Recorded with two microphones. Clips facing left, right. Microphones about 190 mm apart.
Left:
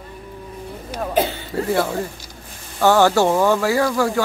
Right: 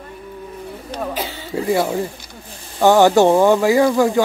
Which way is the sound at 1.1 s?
55° left (ahead or behind).